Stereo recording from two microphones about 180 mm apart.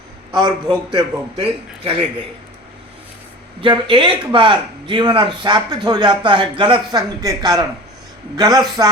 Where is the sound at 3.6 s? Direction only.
25° right (ahead or behind).